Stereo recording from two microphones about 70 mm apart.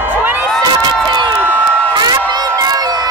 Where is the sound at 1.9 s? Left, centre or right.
Right.